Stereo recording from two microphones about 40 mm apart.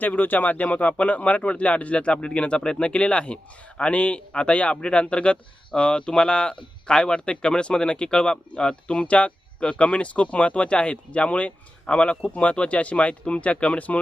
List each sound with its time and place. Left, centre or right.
0.0 s speech: left